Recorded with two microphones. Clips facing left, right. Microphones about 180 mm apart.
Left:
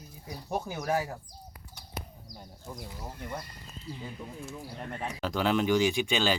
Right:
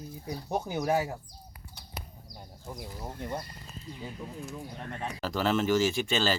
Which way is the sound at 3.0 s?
20° right (ahead or behind).